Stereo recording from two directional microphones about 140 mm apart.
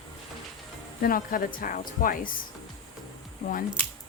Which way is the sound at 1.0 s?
85° left.